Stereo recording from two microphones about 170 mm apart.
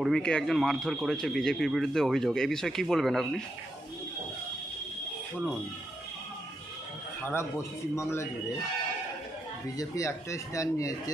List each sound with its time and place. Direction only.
0.0 s speech: 5° left (ahead or behind)
7.2 s a man's voice: 15° left (ahead or behind)
9.8 s speech: 20° left (ahead or behind)